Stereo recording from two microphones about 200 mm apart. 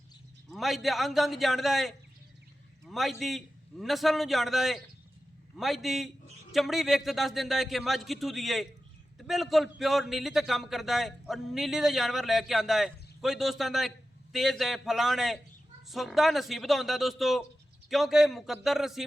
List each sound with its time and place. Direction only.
0.5 s a man's voice: centre (ahead or behind)